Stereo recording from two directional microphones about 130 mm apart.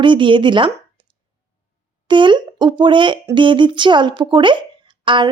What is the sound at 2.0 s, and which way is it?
A woman's voice, 35° right (ahead or behind).